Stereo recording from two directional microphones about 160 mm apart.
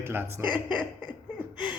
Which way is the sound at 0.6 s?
30° left (ahead or behind).